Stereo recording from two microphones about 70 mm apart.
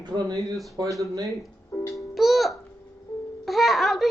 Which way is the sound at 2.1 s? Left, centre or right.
Centre.